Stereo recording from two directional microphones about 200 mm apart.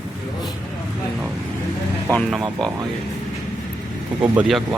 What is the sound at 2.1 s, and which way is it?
Speech, centre (ahead or behind).